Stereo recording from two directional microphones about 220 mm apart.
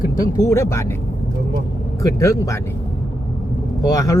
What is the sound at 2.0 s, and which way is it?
Speech, 15° left (ahead or behind).